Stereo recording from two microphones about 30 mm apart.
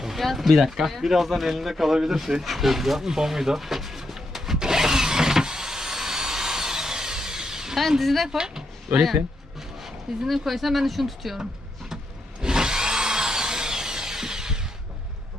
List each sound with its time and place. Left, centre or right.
0.2 s speech: centre
3.1 s pigeon: centre
4.6 s a sound: centre
7.8 s speech: centre
10.2 s speech: centre
12.4 s drill: right